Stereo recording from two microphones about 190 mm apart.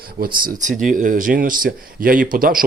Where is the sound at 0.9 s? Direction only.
45° right (ahead or behind).